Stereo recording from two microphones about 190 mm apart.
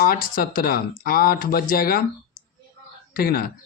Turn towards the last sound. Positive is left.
turn(degrees=50)  # may be behind; listen again after turning